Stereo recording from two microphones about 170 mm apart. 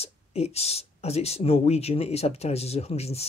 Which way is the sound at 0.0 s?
40° left (ahead or behind).